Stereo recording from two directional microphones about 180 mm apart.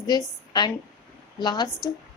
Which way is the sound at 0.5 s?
25° left (ahead or behind).